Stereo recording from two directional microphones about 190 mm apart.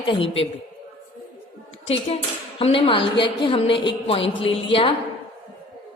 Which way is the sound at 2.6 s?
30° left (ahead or behind).